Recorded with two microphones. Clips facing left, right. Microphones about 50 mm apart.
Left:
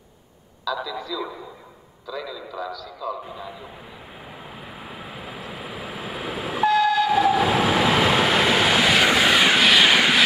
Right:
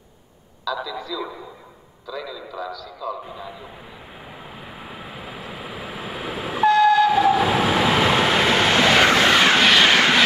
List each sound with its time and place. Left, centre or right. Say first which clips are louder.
0.7 s a man's voice: even; centre
4.3 s vehicle: even; centre